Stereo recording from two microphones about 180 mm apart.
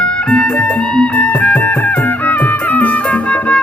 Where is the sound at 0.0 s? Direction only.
5° left (ahead or behind).